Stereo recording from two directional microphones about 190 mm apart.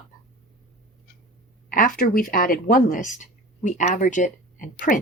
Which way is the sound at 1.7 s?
45° left (ahead or behind).